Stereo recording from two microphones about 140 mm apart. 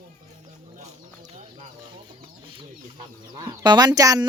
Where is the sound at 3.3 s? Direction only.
30° right (ahead or behind).